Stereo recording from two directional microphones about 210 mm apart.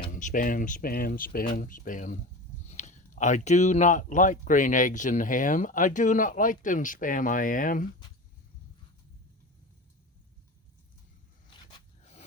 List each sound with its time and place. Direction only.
0.1 s speech: 40° left (ahead or behind)